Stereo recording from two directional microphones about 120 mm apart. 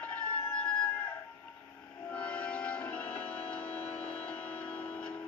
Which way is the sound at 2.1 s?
10° left (ahead or behind).